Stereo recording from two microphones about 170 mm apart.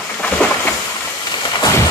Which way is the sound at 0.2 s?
10° left (ahead or behind).